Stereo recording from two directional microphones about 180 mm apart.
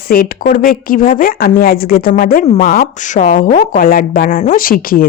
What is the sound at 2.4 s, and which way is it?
A woman's voice, 40° left (ahead or behind).